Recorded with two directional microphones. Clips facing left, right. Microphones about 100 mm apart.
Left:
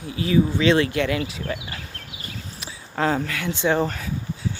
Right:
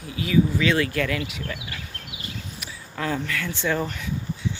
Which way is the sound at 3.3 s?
20° left (ahead or behind).